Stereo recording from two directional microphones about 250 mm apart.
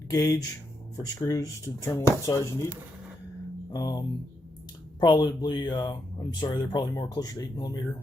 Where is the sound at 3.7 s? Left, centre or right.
Centre.